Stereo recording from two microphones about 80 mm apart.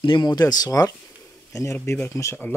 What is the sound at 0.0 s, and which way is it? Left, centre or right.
Speech, left.